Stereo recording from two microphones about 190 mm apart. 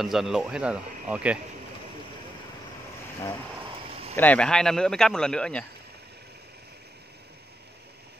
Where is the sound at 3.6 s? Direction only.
30° right (ahead or behind).